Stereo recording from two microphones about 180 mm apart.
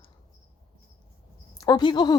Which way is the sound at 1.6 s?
25° left (ahead or behind).